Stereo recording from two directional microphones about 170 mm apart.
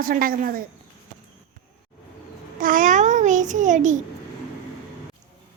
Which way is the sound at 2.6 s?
50° right (ahead or behind).